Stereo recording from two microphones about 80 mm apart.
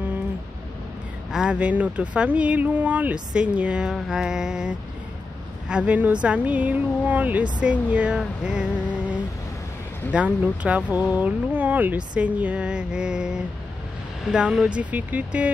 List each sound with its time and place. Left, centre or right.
1.3 s speech: centre
8.5 s a sound: centre
10.1 s speech: centre
14.8 s speech: centre